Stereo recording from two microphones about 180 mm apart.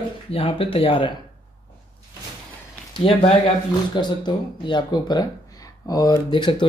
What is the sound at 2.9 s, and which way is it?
Speech, 35° left (ahead or behind).